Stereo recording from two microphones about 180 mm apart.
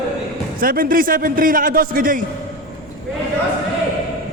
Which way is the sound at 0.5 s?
50° right (ahead or behind).